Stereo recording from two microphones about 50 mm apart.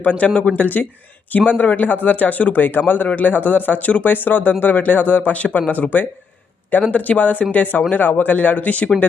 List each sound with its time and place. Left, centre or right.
0.0 s a man's voice: left